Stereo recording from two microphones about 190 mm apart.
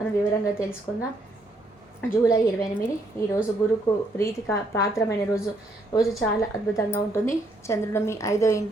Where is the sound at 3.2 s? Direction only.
15° left (ahead or behind).